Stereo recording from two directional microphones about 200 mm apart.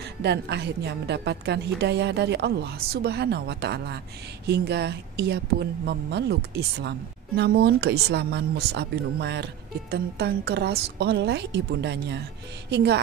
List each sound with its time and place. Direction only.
0.2 s a woman's voice: 55° right (ahead or behind)